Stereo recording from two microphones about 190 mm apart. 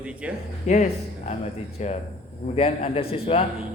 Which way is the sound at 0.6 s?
40° left (ahead or behind).